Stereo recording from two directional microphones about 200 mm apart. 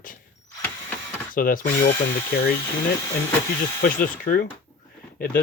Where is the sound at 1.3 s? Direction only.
45° left (ahead or behind).